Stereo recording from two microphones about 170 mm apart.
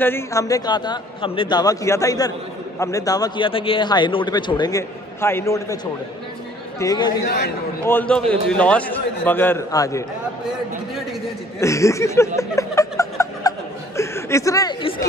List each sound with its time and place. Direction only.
0.0 s a man's voice: 15° left (ahead or behind)
6.8 s a man's voice: 25° left (ahead or behind)
7.2 s a man's voice: 70° left (ahead or behind)
7.8 s a man's voice: 10° left (ahead or behind)
11.6 s a man's voice: 15° left (ahead or behind)
12.4 s chuckle: 20° left (ahead or behind)